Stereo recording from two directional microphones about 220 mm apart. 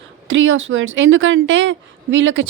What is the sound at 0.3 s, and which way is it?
A woman's voice, 60° right (ahead or behind).